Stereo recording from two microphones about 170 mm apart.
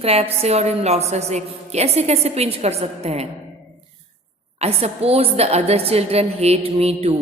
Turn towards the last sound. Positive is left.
turn(degrees=-35)  # may be behind; listen again after turning